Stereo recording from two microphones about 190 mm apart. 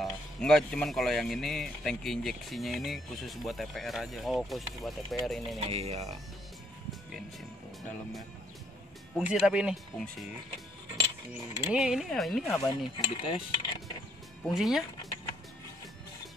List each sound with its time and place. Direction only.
0.0 s speech: 5° left (ahead or behind)
5.6 s speech: 35° right (ahead or behind)
9.1 s speech: 5° right (ahead or behind)
11.6 s speech: 5° right (ahead or behind)
12.6 s cutlery: 25° left (ahead or behind)
13.7 s music: 20° left (ahead or behind)
14.4 s speech: centre (ahead or behind)